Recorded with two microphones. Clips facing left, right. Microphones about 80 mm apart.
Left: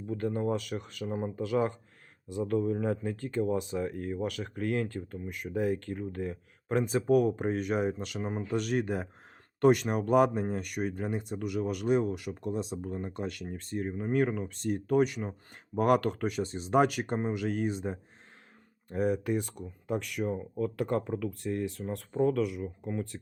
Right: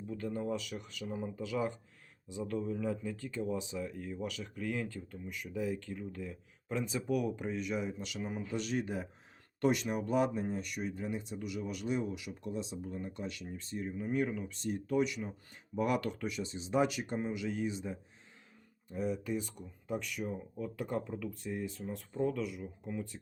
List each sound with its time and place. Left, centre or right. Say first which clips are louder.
0.1 s speech: left 6 dB; left
18.9 s speech: left 7 dB; left